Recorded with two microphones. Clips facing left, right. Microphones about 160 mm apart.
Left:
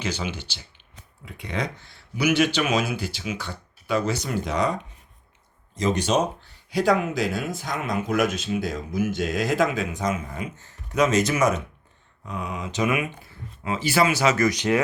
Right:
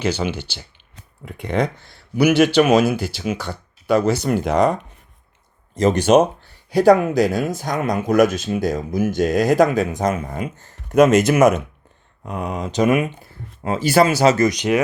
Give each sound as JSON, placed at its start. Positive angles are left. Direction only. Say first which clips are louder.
{"t": 0.0, "sound": "speech", "louder": "right 8 dB", "side_deg": -65}
{"t": 1.2, "sound": "speech", "louder": "right 8 dB", "side_deg": -55}
{"t": 3.2, "sound": "speech", "louder": "right 7 dB", "side_deg": -40}
{"t": 4.2, "sound": "speech", "louder": "right 8 dB", "side_deg": -55}
{"t": 5.8, "sound": "speech", "louder": "right 8 dB", "side_deg": -55}
{"t": 6.7, "sound": "speech", "louder": "right 8 dB", "side_deg": -40}
{"t": 10.0, "sound": "speech", "louder": "right 6 dB", "side_deg": -60}
{"t": 14.5, "sound": "speech", "louder": "right 3 dB", "side_deg": -15}